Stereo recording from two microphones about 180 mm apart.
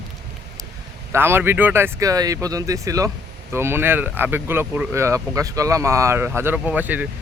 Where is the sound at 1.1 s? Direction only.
10° right (ahead or behind).